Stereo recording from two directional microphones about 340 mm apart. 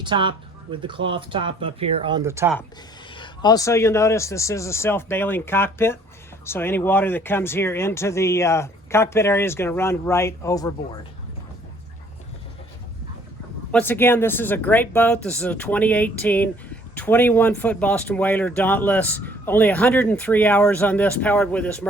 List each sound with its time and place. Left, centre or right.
0.0 s speech: centre
3.1 s speech: centre
13.7 s speech: centre